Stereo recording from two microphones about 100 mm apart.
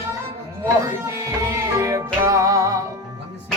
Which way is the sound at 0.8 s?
30° right (ahead or behind).